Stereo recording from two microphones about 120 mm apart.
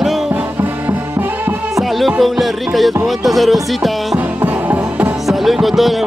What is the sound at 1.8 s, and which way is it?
Music, centre (ahead or behind).